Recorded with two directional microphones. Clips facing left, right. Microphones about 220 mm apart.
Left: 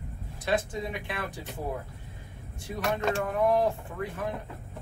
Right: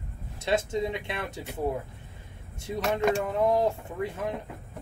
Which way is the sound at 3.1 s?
20° right (ahead or behind).